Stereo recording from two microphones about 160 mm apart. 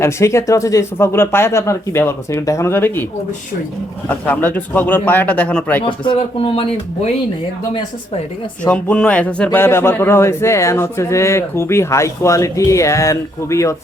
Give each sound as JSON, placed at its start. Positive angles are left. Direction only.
{"t": 0.0, "sound": "a man's voice", "side_deg": 15}
{"t": 4.1, "sound": "a man's voice", "side_deg": 10}
{"t": 5.8, "sound": "speech", "side_deg": 35}
{"t": 8.6, "sound": "a man's voice", "side_deg": 5}